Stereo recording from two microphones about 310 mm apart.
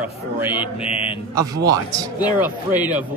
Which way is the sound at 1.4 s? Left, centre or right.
Centre.